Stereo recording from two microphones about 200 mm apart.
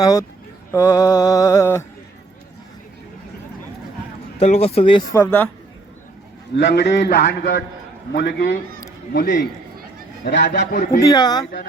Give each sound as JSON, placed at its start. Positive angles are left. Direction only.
{"t": 0.0, "sound": "mantra", "side_deg": 15}
{"t": 4.4, "sound": "speech", "side_deg": 30}
{"t": 5.1, "sound": "mantra", "side_deg": 10}
{"t": 6.6, "sound": "a man's voice", "side_deg": 60}
{"t": 9.1, "sound": "a man's voice", "side_deg": 40}
{"t": 10.2, "sound": "a man's voice", "side_deg": 60}
{"t": 11.0, "sound": "speech", "side_deg": 20}